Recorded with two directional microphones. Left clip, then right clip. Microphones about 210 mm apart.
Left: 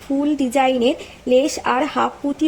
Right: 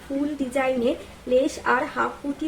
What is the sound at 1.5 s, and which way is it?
Speech, 35° left (ahead or behind).